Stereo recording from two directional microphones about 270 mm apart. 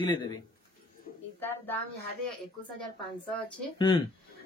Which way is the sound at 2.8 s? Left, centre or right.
Centre.